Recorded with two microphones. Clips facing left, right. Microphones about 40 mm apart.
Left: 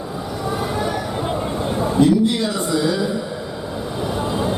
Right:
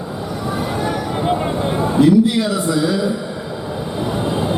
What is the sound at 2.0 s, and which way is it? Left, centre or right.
Speech, centre.